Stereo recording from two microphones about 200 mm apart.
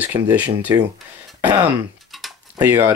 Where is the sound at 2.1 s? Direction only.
Centre (ahead or behind).